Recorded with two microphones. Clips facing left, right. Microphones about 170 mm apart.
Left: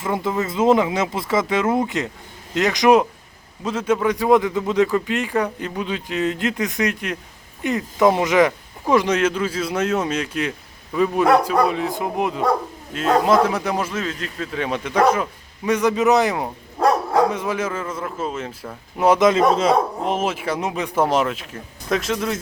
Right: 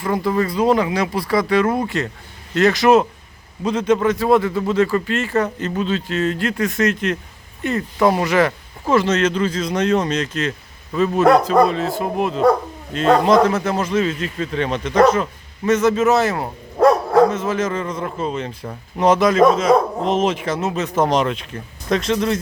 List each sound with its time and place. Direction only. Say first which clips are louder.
0.0 s a man's voice: right 3 dB; 20° left (ahead or behind)
14.0 s a man's voice: right 6 dB; centre (ahead or behind)
19.2 s speech: right 2 dB; 25° left (ahead or behind)
20.1 s a man's voice: right 3 dB; 10° left (ahead or behind)